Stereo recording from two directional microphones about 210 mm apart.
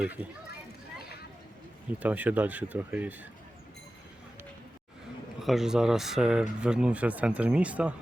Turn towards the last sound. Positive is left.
turn(degrees=-5)  # may be behind; listen again after turning